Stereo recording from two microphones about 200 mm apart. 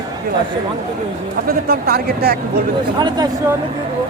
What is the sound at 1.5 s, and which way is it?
Speech, 50° right (ahead or behind).